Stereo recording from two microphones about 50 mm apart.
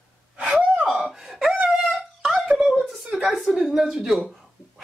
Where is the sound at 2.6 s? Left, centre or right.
Centre.